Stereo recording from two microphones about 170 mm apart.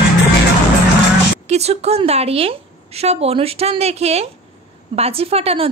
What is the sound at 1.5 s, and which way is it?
A woman's voice, 40° right (ahead or behind).